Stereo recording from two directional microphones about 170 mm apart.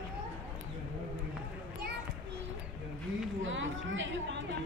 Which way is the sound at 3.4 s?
90° right.